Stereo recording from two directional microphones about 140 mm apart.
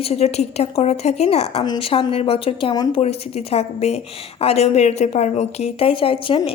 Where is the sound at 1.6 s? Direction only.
35° left (ahead or behind).